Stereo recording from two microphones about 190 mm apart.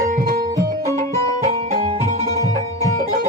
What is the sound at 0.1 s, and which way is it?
Music, 50° right (ahead or behind).